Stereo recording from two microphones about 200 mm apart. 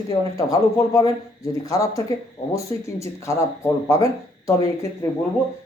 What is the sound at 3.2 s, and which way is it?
Speech, 15° left (ahead or behind).